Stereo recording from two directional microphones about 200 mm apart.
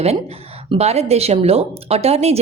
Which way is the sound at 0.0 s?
30° right (ahead or behind).